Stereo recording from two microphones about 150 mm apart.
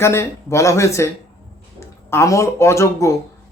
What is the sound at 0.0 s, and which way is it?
Speech, 20° left (ahead or behind).